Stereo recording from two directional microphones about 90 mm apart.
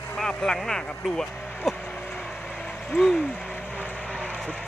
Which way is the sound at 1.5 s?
Centre (ahead or behind).